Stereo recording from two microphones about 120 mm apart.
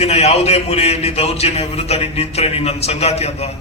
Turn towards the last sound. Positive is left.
turn(degrees=60)  # may be behind; listen again after turning